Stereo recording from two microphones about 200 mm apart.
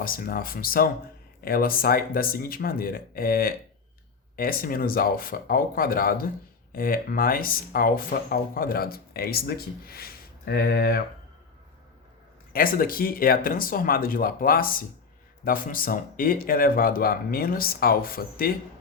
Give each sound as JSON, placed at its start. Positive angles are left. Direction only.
{"t": 0.0, "sound": "speech", "side_deg": 45}
{"t": 12.5, "sound": "speech", "side_deg": 45}